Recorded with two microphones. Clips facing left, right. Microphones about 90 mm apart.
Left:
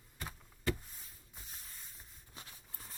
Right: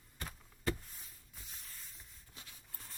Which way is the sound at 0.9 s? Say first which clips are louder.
Left 1 dB; 30° left (ahead or behind).